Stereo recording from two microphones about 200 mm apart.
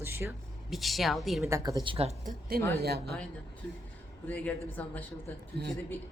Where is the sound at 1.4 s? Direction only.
15° right (ahead or behind).